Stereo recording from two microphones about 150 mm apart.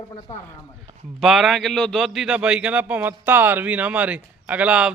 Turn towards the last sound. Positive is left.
turn(degrees=-5)  # may be behind; listen again after turning